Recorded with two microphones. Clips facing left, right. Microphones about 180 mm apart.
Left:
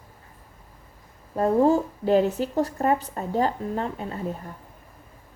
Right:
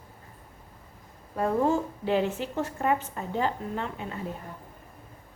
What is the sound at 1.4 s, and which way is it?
A woman's voice, 35° left (ahead or behind).